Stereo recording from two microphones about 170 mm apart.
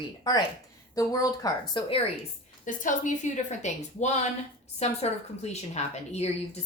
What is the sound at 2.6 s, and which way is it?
A woman's voice, 50° left (ahead or behind).